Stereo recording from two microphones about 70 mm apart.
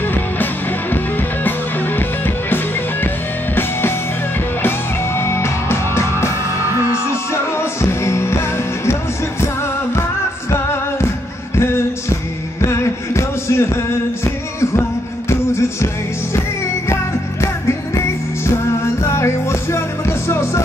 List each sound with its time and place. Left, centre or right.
0.0 s music: left
4.6 s music: left
10.5 s music: left